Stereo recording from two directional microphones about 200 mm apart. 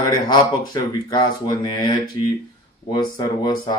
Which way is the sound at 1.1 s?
20° left (ahead or behind).